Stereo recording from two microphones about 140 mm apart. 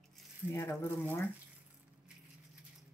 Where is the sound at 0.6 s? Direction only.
15° left (ahead or behind).